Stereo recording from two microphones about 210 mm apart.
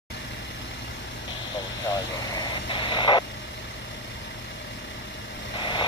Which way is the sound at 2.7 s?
25° left (ahead or behind).